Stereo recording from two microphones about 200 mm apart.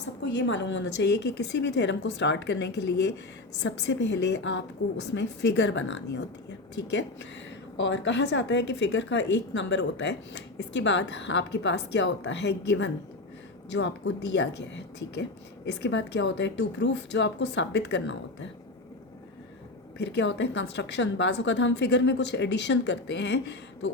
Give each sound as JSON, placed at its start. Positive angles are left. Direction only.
{"t": 0.0, "sound": "speech", "side_deg": 65}
{"t": 20.0, "sound": "speech", "side_deg": 60}